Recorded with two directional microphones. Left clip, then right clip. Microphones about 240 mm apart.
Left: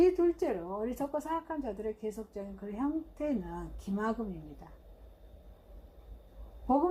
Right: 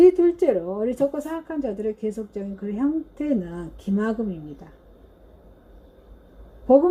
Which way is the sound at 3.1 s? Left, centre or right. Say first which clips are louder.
Right 9 dB; centre.